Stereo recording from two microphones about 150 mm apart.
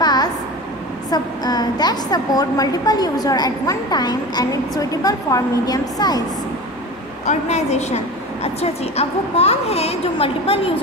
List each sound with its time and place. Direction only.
0.0 s a sound: 25° left (ahead or behind)
1.1 s a woman's voice: 25° left (ahead or behind)
7.2 s a woman's voice: 50° left (ahead or behind)